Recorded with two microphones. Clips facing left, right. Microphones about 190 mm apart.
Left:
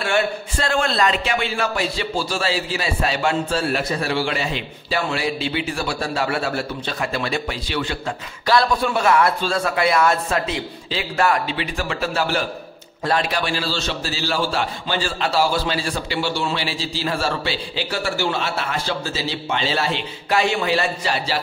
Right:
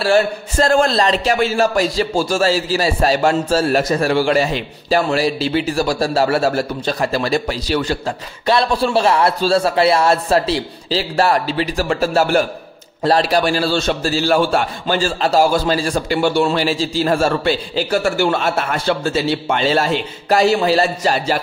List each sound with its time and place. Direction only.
0.0 s a man's voice: 40° right (ahead or behind)
8.5 s a man's voice: 25° right (ahead or behind); by 12.4 s 45° right (ahead or behind)
13.0 s a man's voice: 35° right (ahead or behind)